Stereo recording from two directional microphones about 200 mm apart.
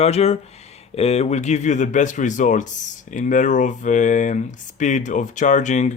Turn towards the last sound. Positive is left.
turn(degrees=35)  # may be behind; listen again after turning